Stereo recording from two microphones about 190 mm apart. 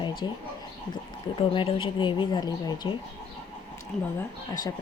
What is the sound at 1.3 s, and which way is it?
Speech, 25° left (ahead or behind).